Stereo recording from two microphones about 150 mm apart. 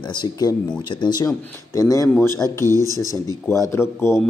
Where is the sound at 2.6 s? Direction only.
20° right (ahead or behind).